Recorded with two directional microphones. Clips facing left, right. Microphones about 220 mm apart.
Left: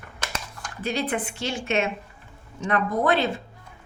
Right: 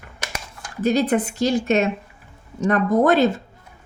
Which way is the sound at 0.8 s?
40° right (ahead or behind).